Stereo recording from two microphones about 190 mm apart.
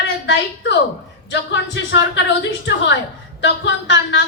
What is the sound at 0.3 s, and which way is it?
A woman's voice, 65° left (ahead or behind).